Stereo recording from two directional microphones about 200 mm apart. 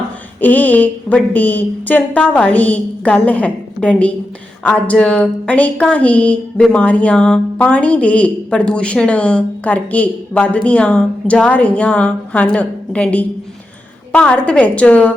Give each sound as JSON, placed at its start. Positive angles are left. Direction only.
{"t": 0.4, "sound": "speech", "side_deg": 10}